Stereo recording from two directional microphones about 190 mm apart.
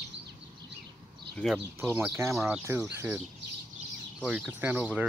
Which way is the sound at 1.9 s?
15° right (ahead or behind).